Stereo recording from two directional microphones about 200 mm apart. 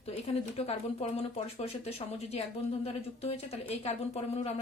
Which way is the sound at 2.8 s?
30° left (ahead or behind).